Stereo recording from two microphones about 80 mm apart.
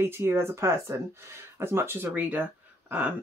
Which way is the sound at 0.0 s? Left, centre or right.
Right.